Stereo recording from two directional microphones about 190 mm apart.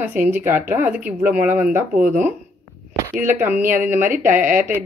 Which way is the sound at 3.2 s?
10° right (ahead or behind).